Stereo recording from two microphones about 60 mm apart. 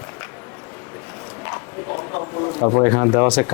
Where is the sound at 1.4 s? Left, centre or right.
Left.